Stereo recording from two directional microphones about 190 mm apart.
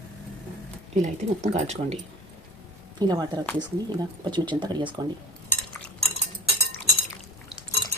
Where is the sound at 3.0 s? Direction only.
20° right (ahead or behind).